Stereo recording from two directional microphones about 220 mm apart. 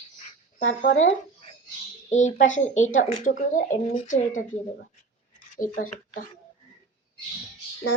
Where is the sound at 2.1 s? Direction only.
35° left (ahead or behind).